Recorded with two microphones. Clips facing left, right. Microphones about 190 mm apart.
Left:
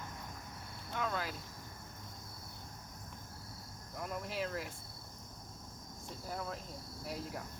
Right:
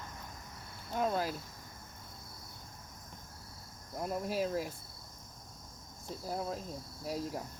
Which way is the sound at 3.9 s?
35° right (ahead or behind).